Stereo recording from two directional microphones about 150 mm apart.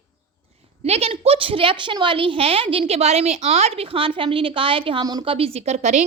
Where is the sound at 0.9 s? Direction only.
45° right (ahead or behind).